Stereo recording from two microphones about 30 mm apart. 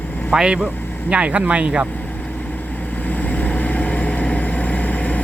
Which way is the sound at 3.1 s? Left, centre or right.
Left.